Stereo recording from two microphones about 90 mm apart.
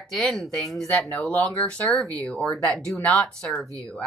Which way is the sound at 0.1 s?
5° left (ahead or behind).